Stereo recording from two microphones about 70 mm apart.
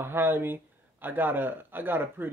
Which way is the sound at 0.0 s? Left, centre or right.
Right.